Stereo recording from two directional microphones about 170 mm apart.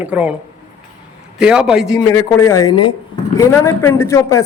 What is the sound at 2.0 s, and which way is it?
A man's voice, 15° left (ahead or behind).